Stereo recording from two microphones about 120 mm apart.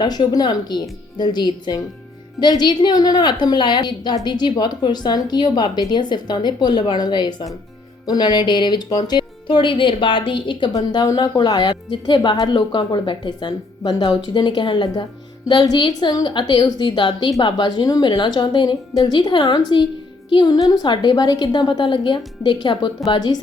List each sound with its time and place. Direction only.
0.0 s speech: 35° left (ahead or behind)
10.7 s speech: 30° left (ahead or behind)